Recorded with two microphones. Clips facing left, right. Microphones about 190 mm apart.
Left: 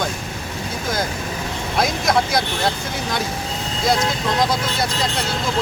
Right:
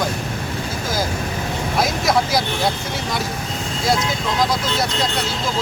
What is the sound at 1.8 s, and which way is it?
Speech, centre (ahead or behind).